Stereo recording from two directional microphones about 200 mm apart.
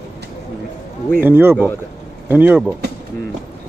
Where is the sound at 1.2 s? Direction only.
10° right (ahead or behind).